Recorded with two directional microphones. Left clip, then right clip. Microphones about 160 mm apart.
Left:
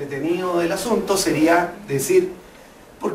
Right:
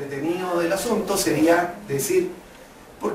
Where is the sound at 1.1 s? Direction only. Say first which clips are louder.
Left 2 dB; 5° left (ahead or behind).